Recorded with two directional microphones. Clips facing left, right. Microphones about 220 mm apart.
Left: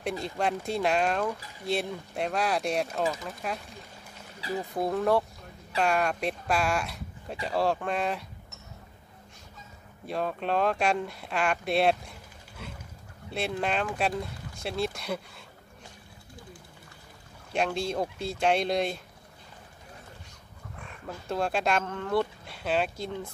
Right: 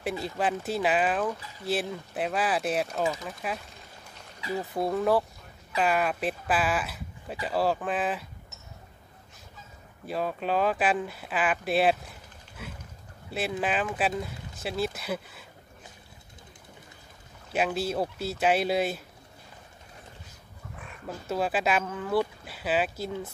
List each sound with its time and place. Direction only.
0.2 s speech: 5° right (ahead or behind)
4.4 s speech: 35° left (ahead or behind)
4.7 s speech: centre (ahead or behind)
10.0 s speech: centre (ahead or behind)
17.5 s speech: 5° right (ahead or behind)
21.3 s speech: 5° right (ahead or behind)